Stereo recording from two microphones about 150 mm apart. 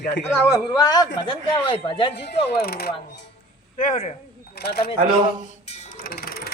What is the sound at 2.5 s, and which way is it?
Speech, 90° left.